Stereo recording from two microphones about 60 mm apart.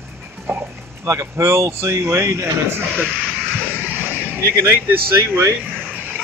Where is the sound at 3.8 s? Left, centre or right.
Right.